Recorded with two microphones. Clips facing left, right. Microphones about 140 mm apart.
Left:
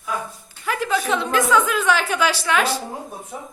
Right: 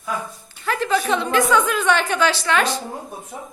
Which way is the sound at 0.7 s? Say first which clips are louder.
Right 2 dB; 5° left (ahead or behind).